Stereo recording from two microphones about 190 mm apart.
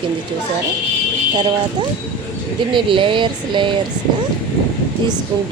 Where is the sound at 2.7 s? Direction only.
25° right (ahead or behind).